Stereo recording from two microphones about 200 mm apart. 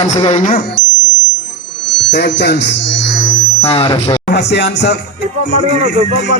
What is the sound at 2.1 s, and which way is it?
Music, 60° left (ahead or behind).